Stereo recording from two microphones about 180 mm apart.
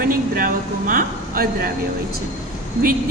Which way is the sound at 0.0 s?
50° right (ahead or behind).